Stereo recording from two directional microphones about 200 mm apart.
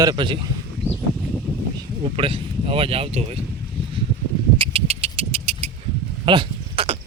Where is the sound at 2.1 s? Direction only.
25° right (ahead or behind).